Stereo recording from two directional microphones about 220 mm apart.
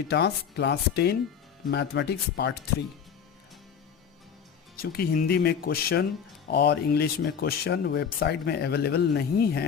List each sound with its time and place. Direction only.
0.1 s speech: 50° left (ahead or behind)
4.8 s speech: 40° left (ahead or behind)